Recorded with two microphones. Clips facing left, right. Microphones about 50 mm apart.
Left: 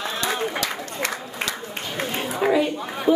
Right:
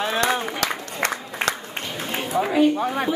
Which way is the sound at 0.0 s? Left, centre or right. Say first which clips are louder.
Right 3 dB; right.